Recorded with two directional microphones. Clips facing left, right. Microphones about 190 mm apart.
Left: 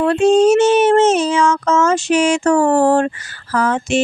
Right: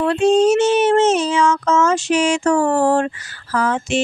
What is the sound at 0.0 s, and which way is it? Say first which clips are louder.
Child singing: left 2 dB; 45° left (ahead or behind).